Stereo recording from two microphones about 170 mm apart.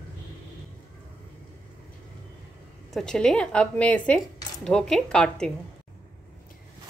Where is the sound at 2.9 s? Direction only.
5° left (ahead or behind).